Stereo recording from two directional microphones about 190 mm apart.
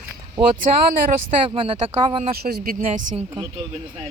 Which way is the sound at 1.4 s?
25° right (ahead or behind).